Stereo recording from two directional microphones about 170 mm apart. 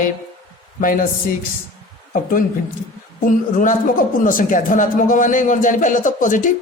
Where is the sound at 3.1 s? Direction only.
50° left (ahead or behind).